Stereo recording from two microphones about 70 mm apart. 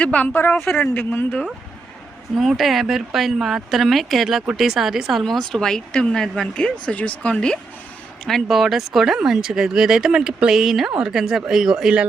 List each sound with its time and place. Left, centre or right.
0.0 s speech: centre
0.5 s speech: centre
0.8 s speech: left
2.3 s speech: centre
5.2 s speech: centre
8.2 s speech: centre